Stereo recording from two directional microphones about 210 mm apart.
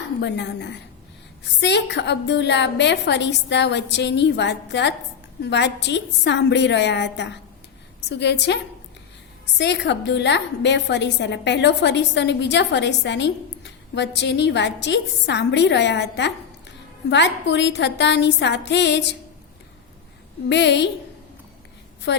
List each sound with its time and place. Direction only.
0.2 s a woman's voice: 55° left (ahead or behind)
9.6 s a woman's voice: 55° left (ahead or behind)
20.5 s a woman's voice: 55° left (ahead or behind)
22.1 s a woman's voice: 55° left (ahead or behind)